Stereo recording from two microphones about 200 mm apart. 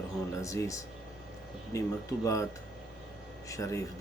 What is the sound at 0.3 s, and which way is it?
A man's voice, 15° left (ahead or behind).